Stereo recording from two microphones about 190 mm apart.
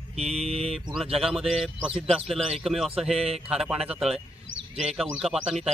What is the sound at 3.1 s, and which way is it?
Speech, 30° right (ahead or behind).